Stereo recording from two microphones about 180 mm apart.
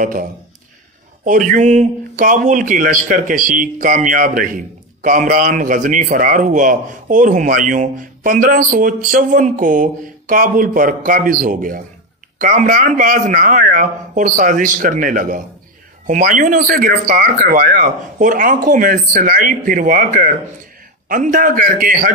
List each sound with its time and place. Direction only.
0.0 s a man's voice: 50° right (ahead or behind)